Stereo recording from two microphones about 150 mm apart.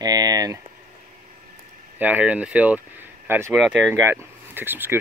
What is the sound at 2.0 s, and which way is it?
Speech, 10° right (ahead or behind).